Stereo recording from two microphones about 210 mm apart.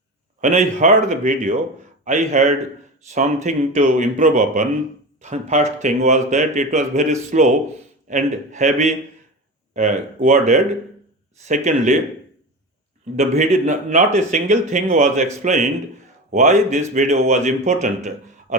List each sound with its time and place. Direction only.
0.4 s speech: 35° right (ahead or behind)
13.1 s speech: 35° right (ahead or behind)